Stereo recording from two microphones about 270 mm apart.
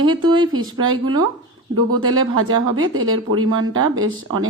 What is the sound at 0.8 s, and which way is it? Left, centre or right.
Speech, right.